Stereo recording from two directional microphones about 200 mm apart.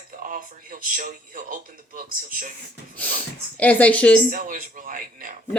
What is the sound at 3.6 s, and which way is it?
Speech, 5° left (ahead or behind).